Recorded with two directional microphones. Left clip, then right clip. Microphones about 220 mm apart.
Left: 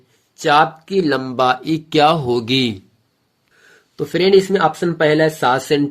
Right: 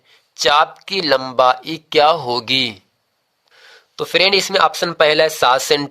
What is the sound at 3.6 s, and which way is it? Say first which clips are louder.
Speech: even; 35° right (ahead or behind).